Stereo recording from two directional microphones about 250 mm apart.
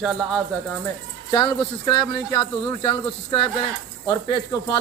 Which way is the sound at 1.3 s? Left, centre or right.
Centre.